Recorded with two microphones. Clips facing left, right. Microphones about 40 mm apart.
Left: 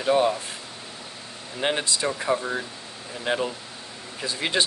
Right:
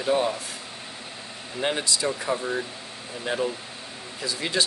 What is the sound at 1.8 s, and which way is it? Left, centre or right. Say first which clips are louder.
Speech: left 1 dB; left.